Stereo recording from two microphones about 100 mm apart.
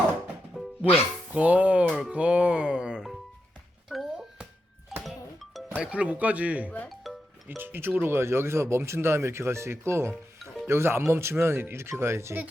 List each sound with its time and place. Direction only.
0.8 s speech: 15° right (ahead or behind)
3.8 s music: centre (ahead or behind)
5.7 s speech: 10° right (ahead or behind)
6.8 s music: centre (ahead or behind)
7.4 s speech: 20° right (ahead or behind)